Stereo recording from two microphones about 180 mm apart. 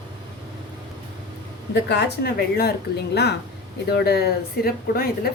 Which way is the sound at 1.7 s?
70° left (ahead or behind).